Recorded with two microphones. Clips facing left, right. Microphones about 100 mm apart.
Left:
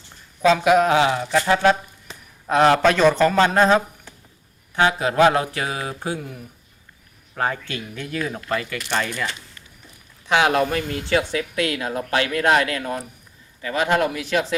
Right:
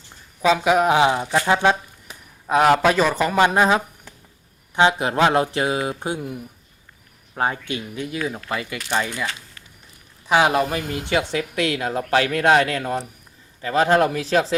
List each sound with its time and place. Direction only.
0.4 s speech: 5° right (ahead or behind)
1.0 s speech: 25° right (ahead or behind)
2.5 s speech: 10° right (ahead or behind)
11.0 s speech: 25° right (ahead or behind)